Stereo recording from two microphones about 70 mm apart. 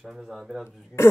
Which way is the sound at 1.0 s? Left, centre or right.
Left.